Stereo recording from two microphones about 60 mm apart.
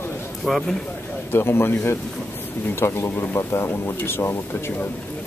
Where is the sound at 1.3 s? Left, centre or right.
Left.